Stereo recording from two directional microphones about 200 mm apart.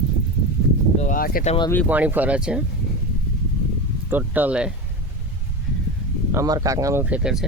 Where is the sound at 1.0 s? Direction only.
45° left (ahead or behind).